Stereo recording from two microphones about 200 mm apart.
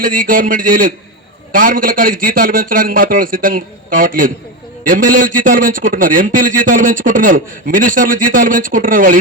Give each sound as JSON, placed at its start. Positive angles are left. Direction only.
{"t": 0.0, "sound": "a man's voice", "side_deg": -45}